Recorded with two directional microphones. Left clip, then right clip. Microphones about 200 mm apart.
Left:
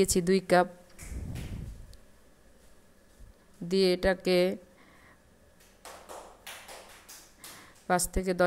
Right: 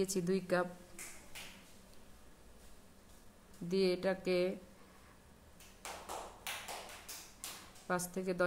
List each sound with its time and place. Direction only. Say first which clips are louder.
0.0 s speech: left 10 dB; 30° left (ahead or behind)
3.6 s speech: left 8 dB; 30° left (ahead or behind)
7.8 s speech: left 9 dB; 30° left (ahead or behind)